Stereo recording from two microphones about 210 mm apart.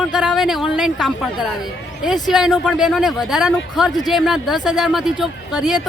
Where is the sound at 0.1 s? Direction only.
Centre (ahead or behind).